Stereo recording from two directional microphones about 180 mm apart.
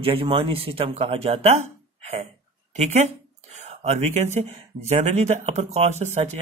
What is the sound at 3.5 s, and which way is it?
A man's voice, 40° right (ahead or behind).